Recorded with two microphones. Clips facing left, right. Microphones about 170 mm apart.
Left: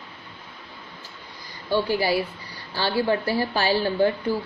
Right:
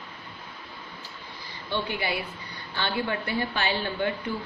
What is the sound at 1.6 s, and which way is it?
Speech, 40° left (ahead or behind).